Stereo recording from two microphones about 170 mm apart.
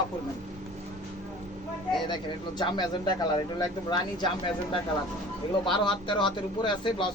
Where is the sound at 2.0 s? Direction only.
25° left (ahead or behind).